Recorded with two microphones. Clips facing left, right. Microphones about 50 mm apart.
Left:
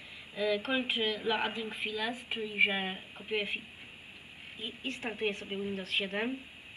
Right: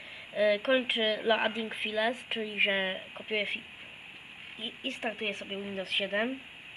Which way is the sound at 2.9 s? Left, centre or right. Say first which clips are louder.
Right 2 dB; right.